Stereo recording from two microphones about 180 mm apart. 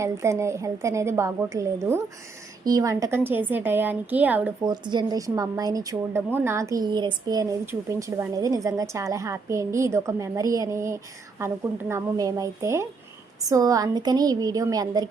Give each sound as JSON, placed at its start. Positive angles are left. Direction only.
{"t": 0.0, "sound": "a woman's voice", "side_deg": -15}
{"t": 4.6, "sound": "a woman's voice", "side_deg": -25}